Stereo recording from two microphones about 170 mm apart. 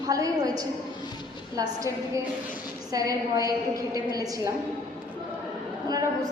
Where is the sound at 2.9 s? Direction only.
20° right (ahead or behind).